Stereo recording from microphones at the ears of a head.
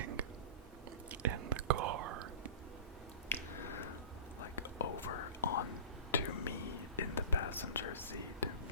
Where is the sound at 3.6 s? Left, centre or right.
Left.